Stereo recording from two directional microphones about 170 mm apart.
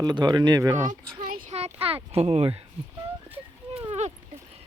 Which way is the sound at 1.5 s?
35° right (ahead or behind).